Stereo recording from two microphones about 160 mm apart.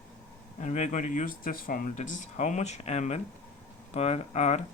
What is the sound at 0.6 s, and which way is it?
Speech, 45° left (ahead or behind).